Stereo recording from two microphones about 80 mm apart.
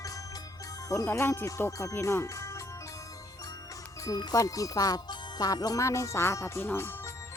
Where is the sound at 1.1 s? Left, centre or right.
Left.